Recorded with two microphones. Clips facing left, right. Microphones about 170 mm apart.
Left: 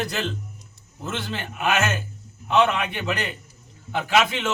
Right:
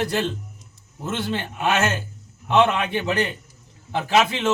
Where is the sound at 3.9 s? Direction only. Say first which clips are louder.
Right 2 dB; 35° right (ahead or behind).